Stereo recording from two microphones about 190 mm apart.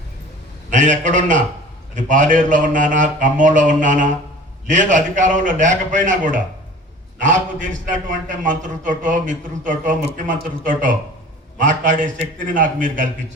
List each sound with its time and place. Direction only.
0.7 s mantra: 40° right (ahead or behind)
7.2 s a man's voice: 40° right (ahead or behind)